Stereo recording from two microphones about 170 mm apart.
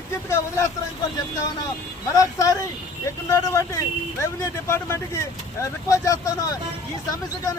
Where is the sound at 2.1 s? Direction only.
20° left (ahead or behind).